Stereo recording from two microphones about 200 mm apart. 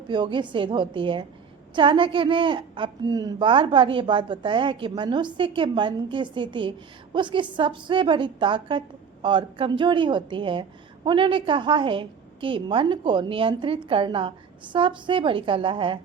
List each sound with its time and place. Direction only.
0.1 s a woman's voice: 25° right (ahead or behind)